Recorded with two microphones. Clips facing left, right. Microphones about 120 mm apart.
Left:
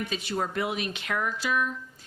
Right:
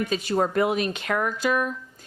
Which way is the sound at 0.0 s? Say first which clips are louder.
Right 7 dB; 45° right (ahead or behind).